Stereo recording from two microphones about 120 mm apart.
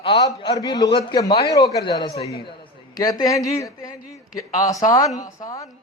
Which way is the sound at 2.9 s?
30° left (ahead or behind).